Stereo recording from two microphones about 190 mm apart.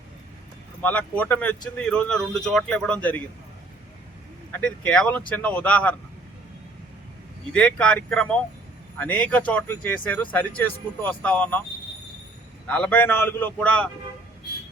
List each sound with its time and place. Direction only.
0.8 s a man's voice: 5° left (ahead or behind)
4.6 s a man's voice: 5° left (ahead or behind)
7.5 s a man's voice: 5° left (ahead or behind)
12.6 s speech: 5° left (ahead or behind)